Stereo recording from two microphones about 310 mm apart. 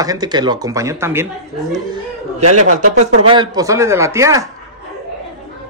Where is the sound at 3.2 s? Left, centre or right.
Centre.